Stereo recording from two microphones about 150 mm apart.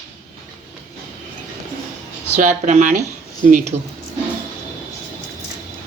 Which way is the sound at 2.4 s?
50° right (ahead or behind).